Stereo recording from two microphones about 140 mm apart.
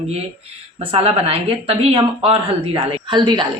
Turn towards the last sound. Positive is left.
turn(degrees=-35)  # may be behind; listen again after turning